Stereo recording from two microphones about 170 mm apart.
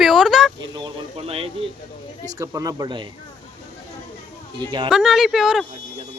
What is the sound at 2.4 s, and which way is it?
Speech, 20° right (ahead or behind).